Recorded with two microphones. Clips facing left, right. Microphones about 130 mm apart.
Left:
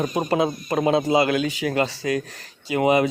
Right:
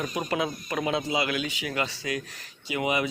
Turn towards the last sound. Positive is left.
turn(degrees=40)  # may be behind; listen again after turning